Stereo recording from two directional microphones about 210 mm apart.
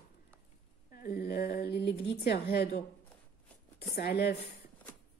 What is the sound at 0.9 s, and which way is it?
A woman's voice, 45° left (ahead or behind).